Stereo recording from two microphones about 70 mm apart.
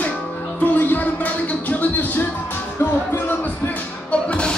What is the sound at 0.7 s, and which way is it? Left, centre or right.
Music, left.